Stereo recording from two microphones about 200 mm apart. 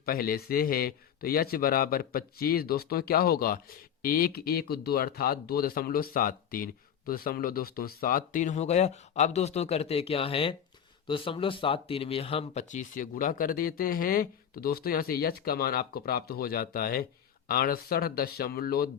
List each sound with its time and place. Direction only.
0.0 s speech: 45° left (ahead or behind)